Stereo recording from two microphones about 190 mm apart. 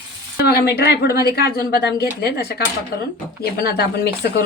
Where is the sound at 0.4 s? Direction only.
55° left (ahead or behind).